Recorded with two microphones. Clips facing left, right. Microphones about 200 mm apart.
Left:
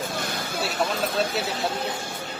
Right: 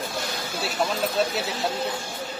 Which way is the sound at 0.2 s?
55° left (ahead or behind).